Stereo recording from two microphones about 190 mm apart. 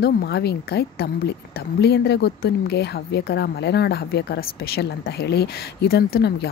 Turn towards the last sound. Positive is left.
turn(degrees=55)  # may be behind; listen again after turning